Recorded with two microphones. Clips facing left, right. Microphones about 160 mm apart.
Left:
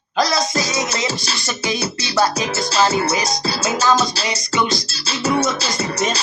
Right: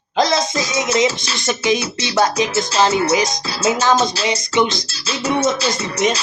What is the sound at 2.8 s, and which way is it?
Music, 20° right (ahead or behind).